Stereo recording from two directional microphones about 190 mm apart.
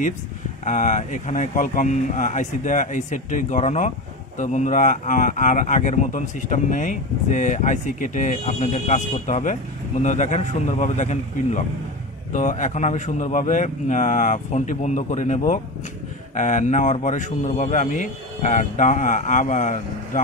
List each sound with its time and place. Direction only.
0.7 s speech: 40° left (ahead or behind)